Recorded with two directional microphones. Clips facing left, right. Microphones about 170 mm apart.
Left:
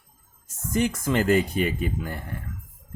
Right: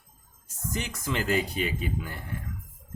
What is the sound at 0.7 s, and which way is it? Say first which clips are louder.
Speech: left 9 dB; 50° left (ahead or behind).